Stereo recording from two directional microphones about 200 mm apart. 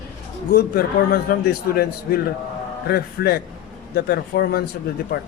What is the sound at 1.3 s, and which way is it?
Speech, 50° left (ahead or behind).